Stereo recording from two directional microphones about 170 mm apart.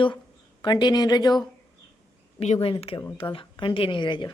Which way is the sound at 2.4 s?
35° left (ahead or behind).